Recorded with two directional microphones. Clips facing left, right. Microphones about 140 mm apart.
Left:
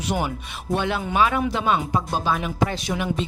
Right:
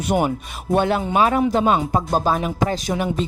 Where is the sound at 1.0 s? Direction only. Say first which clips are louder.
Right 4 dB; 35° right (ahead or behind).